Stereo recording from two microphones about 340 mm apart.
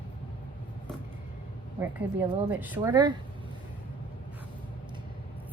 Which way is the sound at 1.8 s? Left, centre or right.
Centre.